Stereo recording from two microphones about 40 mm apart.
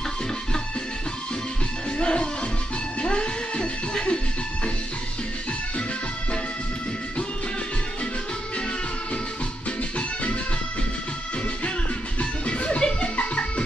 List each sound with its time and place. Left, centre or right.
2.0 s music: left
12.2 s music: left